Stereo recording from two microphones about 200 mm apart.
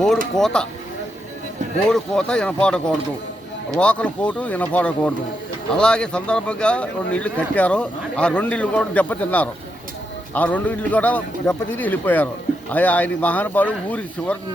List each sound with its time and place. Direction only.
0.3 s speech: 5° left (ahead or behind)
1.9 s a man's voice: 5° left (ahead or behind)